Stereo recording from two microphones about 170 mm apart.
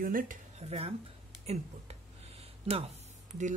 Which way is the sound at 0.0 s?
55° right (ahead or behind).